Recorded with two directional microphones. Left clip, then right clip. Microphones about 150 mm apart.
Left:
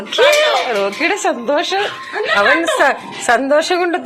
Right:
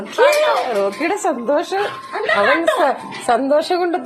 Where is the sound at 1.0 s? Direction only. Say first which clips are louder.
Left 3 dB; centre (ahead or behind).